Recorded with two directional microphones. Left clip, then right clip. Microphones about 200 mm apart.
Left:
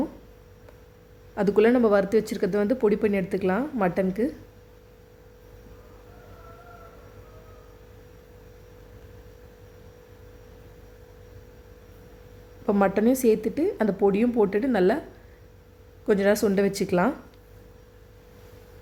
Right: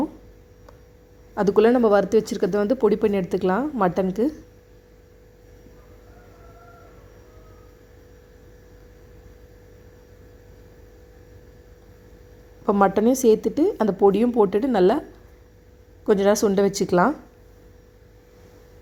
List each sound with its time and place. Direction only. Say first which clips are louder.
1.4 s speech: right 3 dB; 15° right (ahead or behind)
12.6 s speech: right 4 dB; 15° right (ahead or behind)
16.0 s speech: right 3 dB; 15° right (ahead or behind)